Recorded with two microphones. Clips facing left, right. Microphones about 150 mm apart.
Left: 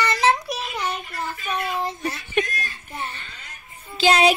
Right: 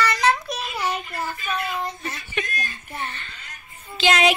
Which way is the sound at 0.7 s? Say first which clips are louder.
Right 1 dB; 10° right (ahead or behind).